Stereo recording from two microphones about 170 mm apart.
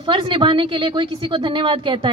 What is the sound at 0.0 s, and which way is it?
A woman's voice, 30° right (ahead or behind).